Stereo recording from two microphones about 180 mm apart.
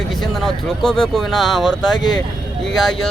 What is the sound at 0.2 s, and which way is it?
Speech, centre (ahead or behind).